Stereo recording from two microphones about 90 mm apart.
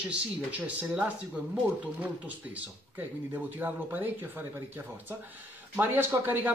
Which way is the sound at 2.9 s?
20° right (ahead or behind).